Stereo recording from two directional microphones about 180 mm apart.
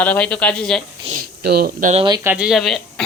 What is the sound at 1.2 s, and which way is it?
Speech, 60° right (ahead or behind).